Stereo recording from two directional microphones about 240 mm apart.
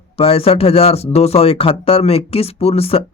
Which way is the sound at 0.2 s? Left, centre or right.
Left.